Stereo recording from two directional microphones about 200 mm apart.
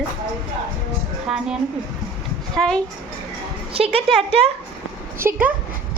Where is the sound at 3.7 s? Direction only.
30° right (ahead or behind).